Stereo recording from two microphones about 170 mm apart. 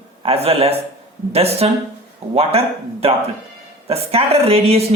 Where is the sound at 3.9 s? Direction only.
35° right (ahead or behind).